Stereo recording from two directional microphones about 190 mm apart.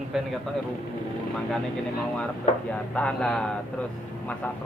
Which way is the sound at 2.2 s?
5° left (ahead or behind).